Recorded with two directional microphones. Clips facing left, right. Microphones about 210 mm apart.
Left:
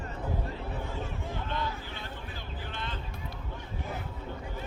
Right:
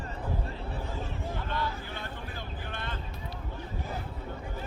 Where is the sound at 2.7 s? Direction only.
55° right (ahead or behind).